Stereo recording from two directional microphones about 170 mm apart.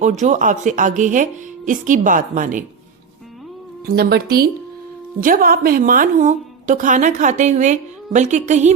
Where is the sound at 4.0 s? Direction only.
70° right (ahead or behind).